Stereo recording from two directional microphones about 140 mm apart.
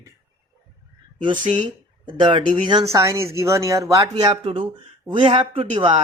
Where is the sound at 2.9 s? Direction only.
20° right (ahead or behind).